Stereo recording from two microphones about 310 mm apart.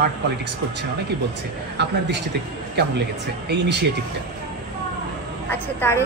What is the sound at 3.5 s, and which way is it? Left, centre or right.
Speech, right.